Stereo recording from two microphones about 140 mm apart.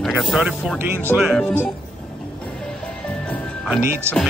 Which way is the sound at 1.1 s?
5° right (ahead or behind).